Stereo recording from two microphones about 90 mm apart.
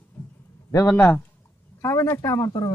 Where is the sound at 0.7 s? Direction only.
30° left (ahead or behind).